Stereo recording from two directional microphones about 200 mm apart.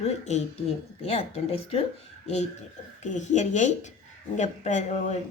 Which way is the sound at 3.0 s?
35° left (ahead or behind).